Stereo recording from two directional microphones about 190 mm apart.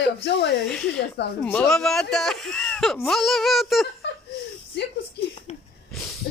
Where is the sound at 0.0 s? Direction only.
65° left (ahead or behind).